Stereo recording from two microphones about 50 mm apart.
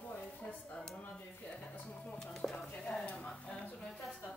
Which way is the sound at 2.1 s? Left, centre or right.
Centre.